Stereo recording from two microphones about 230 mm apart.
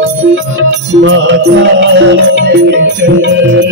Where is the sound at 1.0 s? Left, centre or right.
Right.